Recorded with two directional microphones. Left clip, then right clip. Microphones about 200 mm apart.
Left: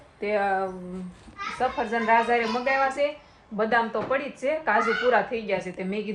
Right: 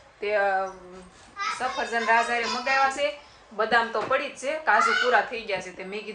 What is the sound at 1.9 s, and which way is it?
Speech, 5° right (ahead or behind).